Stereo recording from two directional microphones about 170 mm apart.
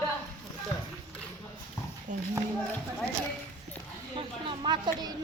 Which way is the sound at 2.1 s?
45° right (ahead or behind).